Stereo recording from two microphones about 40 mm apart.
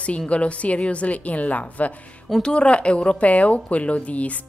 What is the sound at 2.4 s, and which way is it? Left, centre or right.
A woman's voice, left.